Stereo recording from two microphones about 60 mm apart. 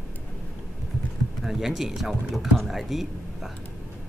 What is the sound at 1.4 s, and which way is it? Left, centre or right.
Speech, centre.